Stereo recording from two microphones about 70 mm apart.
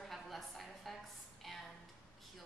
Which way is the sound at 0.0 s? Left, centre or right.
Centre.